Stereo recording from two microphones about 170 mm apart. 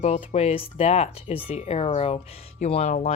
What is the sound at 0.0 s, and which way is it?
Speech, 40° left (ahead or behind).